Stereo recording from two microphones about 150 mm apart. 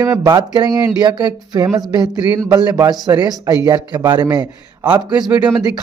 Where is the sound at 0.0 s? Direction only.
20° right (ahead or behind).